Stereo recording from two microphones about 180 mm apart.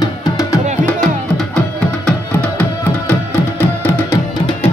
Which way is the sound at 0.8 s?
5° left (ahead or behind).